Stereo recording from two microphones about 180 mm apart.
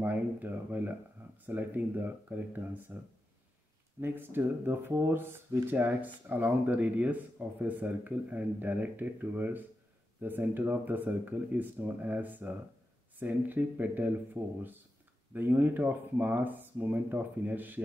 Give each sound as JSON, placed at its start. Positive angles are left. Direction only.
{"t": 0.0, "sound": "speech", "side_deg": -10}
{"t": 4.0, "sound": "speech", "side_deg": -10}